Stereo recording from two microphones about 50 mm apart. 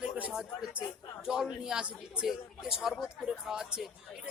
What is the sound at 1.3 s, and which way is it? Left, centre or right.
A man's voice, centre.